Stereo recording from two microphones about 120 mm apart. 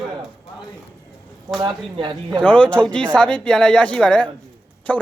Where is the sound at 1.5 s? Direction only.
40° right (ahead or behind).